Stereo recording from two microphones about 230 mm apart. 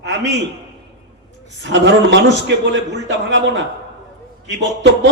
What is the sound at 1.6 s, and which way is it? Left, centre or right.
A man's voice, right.